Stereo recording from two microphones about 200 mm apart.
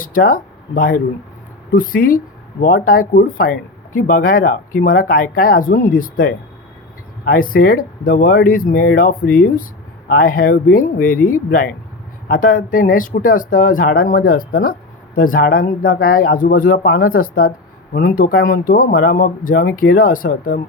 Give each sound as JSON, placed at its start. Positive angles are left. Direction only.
{"t": 0.0, "sound": "speech", "side_deg": 45}